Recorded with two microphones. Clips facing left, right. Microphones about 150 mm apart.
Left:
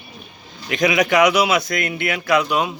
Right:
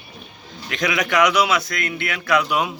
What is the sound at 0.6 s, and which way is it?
A man's voice, 15° left (ahead or behind).